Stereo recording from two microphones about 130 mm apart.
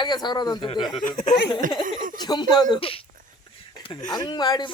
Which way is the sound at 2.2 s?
30° left (ahead or behind).